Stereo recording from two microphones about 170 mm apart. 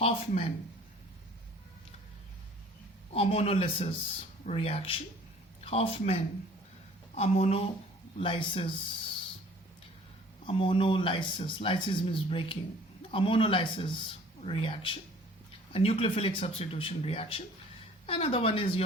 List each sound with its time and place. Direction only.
0.0 s speech: 35° left (ahead or behind)
3.1 s speech: 35° left (ahead or behind)
7.2 s speech: 40° left (ahead or behind)
10.4 s speech: 30° left (ahead or behind)